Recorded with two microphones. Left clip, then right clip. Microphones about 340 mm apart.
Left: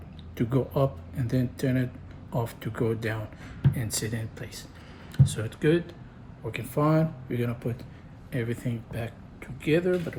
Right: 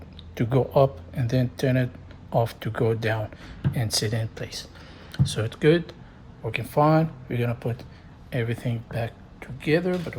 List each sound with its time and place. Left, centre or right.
0.3 s speech: right